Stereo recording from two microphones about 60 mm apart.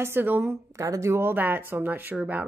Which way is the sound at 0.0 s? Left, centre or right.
Right.